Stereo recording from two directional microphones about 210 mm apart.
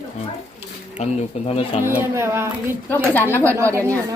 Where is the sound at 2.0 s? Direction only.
10° right (ahead or behind).